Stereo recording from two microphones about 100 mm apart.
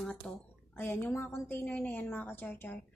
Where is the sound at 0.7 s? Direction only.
20° left (ahead or behind).